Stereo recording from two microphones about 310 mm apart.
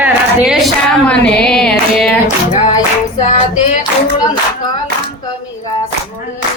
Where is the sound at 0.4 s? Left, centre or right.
Centre.